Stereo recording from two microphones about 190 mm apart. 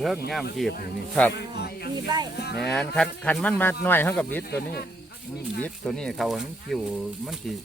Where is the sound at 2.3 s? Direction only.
60° left (ahead or behind).